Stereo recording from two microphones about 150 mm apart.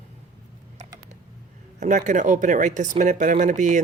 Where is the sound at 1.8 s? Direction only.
50° right (ahead or behind).